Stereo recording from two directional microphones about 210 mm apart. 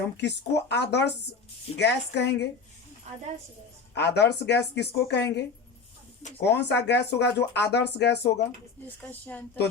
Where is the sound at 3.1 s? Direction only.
30° right (ahead or behind).